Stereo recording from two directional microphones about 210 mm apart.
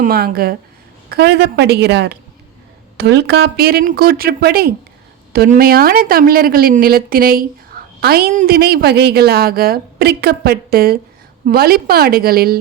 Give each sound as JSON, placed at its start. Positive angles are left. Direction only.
{"t": 0.0, "sound": "a woman's voice", "side_deg": -40}